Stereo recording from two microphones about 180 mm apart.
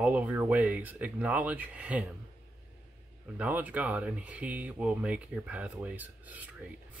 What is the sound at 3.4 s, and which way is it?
Speech, 10° right (ahead or behind).